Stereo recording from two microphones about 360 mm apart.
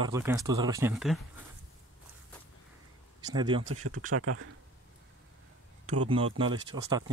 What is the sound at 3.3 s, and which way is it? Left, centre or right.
Speech, centre.